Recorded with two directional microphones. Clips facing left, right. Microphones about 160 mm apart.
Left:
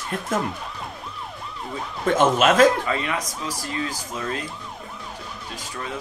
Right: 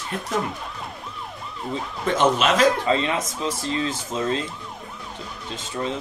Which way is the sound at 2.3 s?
45° left (ahead or behind).